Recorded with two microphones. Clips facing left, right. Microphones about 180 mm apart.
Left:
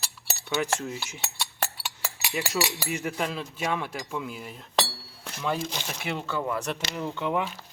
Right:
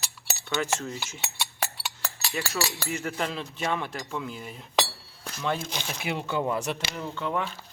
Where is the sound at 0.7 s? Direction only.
10° left (ahead or behind).